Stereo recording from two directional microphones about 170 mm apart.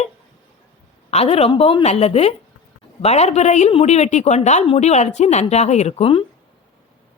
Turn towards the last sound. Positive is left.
turn(degrees=30)  # may be behind; listen again after turning